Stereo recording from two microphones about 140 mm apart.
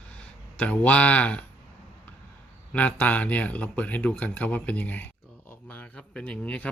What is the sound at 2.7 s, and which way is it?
Speech, 10° left (ahead or behind).